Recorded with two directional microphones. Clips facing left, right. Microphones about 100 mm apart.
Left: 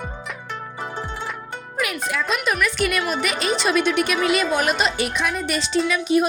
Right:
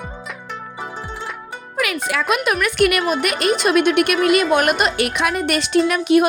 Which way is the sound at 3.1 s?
55° right (ahead or behind).